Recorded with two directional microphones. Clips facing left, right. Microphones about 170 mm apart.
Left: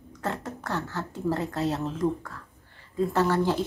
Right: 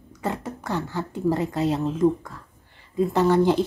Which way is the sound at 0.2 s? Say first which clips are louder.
Right 3 dB; 10° right (ahead or behind).